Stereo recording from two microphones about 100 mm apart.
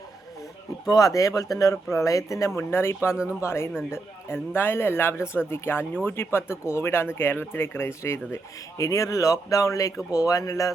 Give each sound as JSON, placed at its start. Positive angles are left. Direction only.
{"t": 0.9, "sound": "speech", "side_deg": 35}